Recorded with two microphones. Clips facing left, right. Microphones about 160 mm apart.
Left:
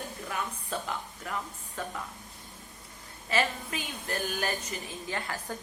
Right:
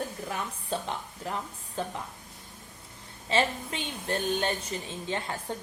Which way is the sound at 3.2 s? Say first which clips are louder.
Right 2 dB; 25° right (ahead or behind).